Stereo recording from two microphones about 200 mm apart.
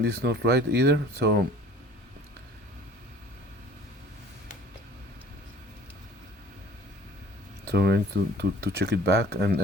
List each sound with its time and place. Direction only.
0.0 s speech: 55° right (ahead or behind)
7.7 s speech: 55° right (ahead or behind)